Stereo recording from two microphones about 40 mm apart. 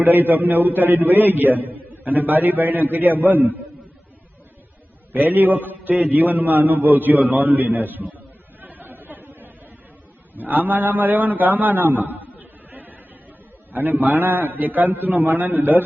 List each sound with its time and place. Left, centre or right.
0.0 s a man's voice: right
5.1 s a man's voice: right
8.6 s chatter: right
10.3 s mantra: right
10.7 s a man's voice: right
12.3 s a sound: right
13.7 s a man's voice: right